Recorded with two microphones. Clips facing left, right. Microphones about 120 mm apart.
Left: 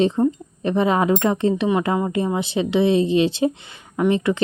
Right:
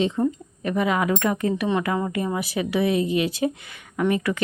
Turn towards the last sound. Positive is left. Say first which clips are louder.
# left 4 dB
turn(degrees=25)  # may be behind; listen again after turning